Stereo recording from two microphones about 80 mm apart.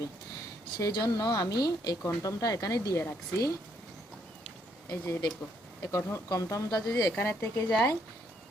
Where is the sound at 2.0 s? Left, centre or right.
Left.